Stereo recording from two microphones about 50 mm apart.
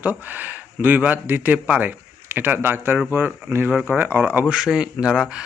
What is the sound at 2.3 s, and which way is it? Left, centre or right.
A man's voice, right.